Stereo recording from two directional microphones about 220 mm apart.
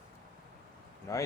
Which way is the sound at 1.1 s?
15° left (ahead or behind).